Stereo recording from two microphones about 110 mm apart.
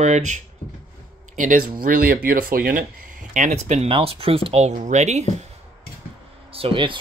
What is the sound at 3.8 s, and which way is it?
Speech, 55° right (ahead or behind).